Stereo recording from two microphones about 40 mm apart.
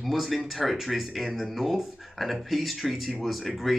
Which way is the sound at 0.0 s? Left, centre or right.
Centre.